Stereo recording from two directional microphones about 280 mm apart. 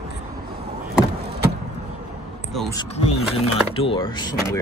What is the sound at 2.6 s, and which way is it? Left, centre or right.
Speech, centre.